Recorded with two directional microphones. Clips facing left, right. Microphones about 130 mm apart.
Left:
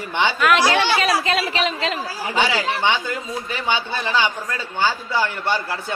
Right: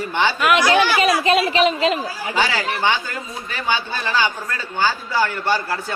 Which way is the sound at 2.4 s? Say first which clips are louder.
Even; 20° left (ahead or behind).